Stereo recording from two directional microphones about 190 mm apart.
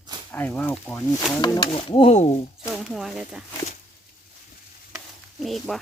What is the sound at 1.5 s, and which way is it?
Speech, 30° left (ahead or behind).